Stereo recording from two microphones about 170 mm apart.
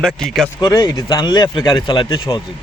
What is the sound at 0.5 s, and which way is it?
Speech, 20° left (ahead or behind).